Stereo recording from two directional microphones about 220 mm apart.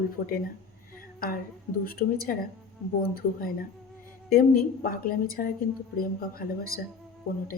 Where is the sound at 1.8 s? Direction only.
40° left (ahead or behind).